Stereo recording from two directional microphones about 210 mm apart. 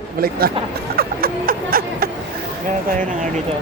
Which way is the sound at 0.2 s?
45° right (ahead or behind).